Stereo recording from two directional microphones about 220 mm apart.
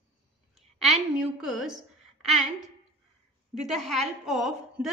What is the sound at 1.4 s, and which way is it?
Speech, centre (ahead or behind).